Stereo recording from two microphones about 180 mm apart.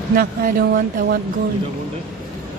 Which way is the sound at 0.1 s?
55° right (ahead or behind).